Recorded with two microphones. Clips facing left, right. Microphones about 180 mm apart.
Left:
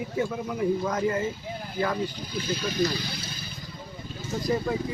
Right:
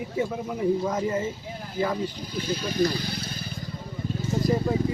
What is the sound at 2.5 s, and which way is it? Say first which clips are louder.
Speech: right 2 dB; 50° right (ahead or behind).